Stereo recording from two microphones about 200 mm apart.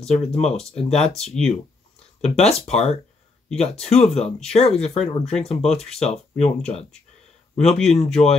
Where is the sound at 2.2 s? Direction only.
35° left (ahead or behind).